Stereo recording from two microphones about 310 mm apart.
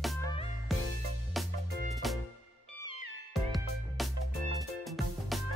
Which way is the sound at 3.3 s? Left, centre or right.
Centre.